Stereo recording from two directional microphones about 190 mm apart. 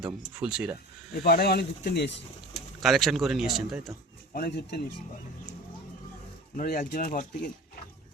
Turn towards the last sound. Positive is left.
turn(degrees=45)  # may be behind; listen again after turning